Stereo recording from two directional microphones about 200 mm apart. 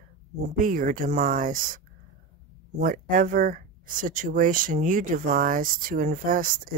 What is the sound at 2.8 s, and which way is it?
Speech, 40° right (ahead or behind).